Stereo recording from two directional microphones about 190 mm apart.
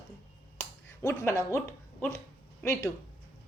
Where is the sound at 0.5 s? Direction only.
15° left (ahead or behind).